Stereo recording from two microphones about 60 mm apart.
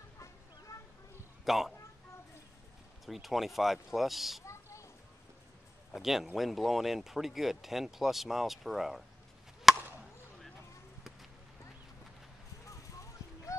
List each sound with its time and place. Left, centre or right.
0.7 s a sound: left
1.4 s a man's voice: centre
3.1 s speech: centre
5.9 s speech: centre
9.7 s chop: centre
12.6 s a sound: left